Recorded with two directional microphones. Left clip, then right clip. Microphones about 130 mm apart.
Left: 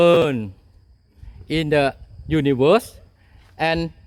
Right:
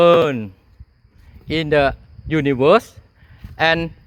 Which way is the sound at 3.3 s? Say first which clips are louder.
Right 5 dB; 30° left (ahead or behind).